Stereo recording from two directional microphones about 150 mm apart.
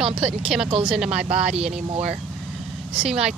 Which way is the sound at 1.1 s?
45° right (ahead or behind).